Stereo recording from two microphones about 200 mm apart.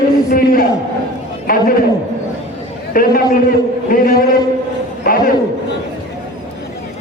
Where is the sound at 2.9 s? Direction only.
45° left (ahead or behind).